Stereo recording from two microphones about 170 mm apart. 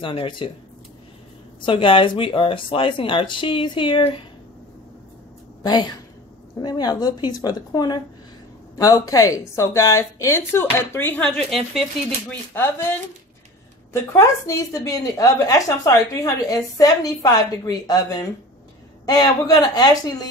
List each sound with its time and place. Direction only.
0.0 s a woman's voice: 30° left (ahead or behind)
1.7 s speech: 30° left (ahead or behind)
5.6 s a woman's voice: 25° left (ahead or behind); by 11.8 s centre (ahead or behind)
12.3 s a woman's voice: 15° left (ahead or behind)
14.1 s a woman's voice: 20° left (ahead or behind)